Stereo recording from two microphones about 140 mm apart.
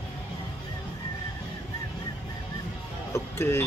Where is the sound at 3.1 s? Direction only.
20° left (ahead or behind).